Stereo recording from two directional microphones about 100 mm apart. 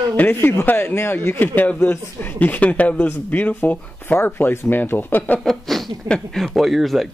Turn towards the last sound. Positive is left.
turn(degrees=0)  # may be behind; listen again after turning